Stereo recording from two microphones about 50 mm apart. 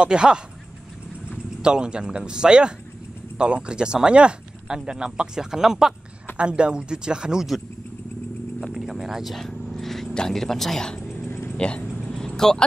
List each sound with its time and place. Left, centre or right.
0.0 s speech: centre
1.6 s speech: centre
6.3 s speech: right
8.7 s a sound: centre
9.3 s vehicle: centre
10.1 s speech: centre
11.2 s a sound: left
11.5 s speech: centre
12.1 s vehicle: centre